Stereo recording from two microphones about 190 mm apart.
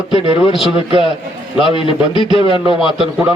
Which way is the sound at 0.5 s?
Centre (ahead or behind).